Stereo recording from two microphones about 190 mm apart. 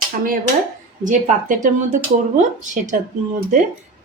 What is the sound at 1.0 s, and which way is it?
Speech, 45° right (ahead or behind).